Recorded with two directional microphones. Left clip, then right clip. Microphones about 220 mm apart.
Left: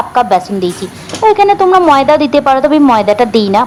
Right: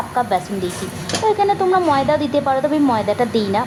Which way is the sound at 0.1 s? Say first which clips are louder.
Left 8 dB; 30° left (ahead or behind).